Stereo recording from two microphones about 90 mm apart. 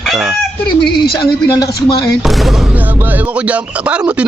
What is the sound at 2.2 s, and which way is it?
Chicken, centre (ahead or behind).